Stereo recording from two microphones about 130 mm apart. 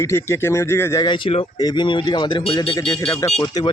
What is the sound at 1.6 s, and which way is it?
Speech, 35° left (ahead or behind).